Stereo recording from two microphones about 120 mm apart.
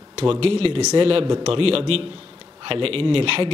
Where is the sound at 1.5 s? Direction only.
50° right (ahead or behind).